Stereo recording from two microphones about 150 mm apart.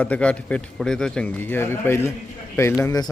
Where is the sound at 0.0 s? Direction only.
10° left (ahead or behind).